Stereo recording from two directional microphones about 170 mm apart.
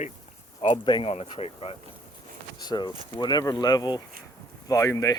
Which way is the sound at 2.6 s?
25° left (ahead or behind).